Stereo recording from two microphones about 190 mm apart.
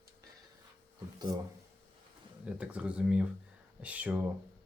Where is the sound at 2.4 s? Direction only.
5° right (ahead or behind).